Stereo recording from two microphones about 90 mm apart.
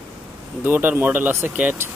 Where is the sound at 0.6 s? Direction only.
20° right (ahead or behind).